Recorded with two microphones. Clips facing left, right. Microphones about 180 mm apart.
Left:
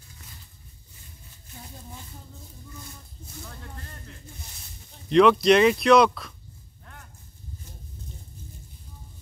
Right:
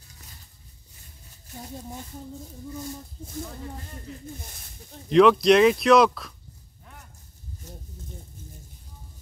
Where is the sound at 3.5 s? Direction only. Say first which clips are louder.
Right 5 dB; 5° right (ahead or behind).